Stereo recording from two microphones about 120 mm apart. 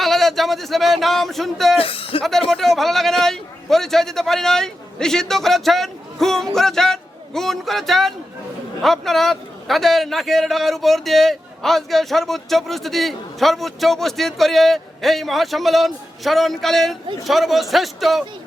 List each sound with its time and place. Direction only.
0.0 s a man's voice: centre (ahead or behind)
1.8 s a man's voice: 50° left (ahead or behind)
2.5 s a man's voice: centre (ahead or behind)